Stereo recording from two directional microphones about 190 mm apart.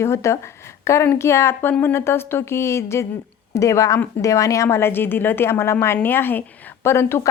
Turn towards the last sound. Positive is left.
turn(degrees=15)  # may be behind; listen again after turning